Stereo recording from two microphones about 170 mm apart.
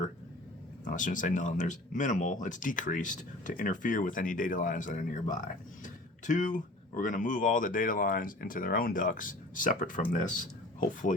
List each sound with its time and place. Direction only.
0.9 s speech: 50° left (ahead or behind)